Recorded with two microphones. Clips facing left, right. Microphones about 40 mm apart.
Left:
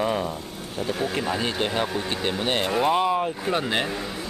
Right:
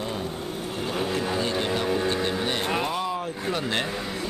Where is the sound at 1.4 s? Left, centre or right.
Left.